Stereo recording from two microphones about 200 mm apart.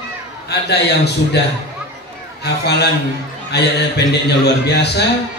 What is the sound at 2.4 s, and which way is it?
A man's voice, 55° left (ahead or behind).